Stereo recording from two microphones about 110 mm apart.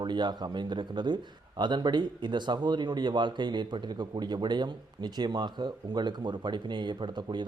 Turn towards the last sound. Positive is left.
turn(degrees=-45)  # may be behind; listen again after turning